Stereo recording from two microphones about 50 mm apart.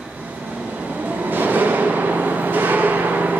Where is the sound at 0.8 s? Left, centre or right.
Right.